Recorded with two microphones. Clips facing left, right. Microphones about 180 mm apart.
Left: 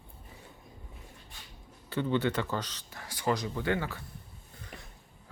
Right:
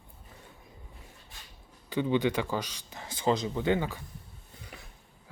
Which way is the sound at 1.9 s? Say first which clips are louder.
Right 2 dB; 15° right (ahead or behind).